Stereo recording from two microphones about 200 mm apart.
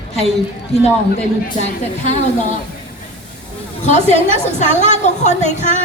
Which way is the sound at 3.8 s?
35° left (ahead or behind).